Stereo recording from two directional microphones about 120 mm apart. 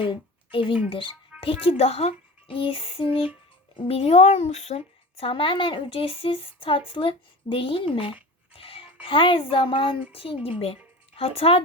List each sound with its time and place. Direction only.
0.0 s speech: 45° left (ahead or behind)